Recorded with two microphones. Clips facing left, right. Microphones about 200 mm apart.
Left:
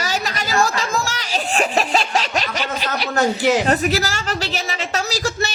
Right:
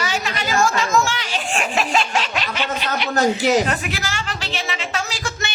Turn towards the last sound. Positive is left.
turn(degrees=40)  # may be behind; listen again after turning